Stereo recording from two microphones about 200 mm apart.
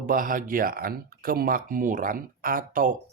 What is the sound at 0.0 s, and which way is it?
Speech, 45° right (ahead or behind).